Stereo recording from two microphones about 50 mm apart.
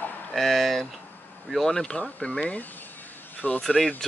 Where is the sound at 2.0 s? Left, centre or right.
Left.